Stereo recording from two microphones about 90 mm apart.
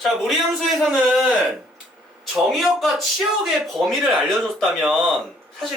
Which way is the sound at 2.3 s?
Centre (ahead or behind).